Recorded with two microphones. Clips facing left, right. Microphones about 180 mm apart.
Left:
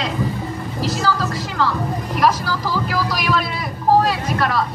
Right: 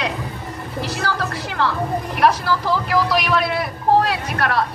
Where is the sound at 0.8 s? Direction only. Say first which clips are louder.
Left 3 dB; 60° right (ahead or behind).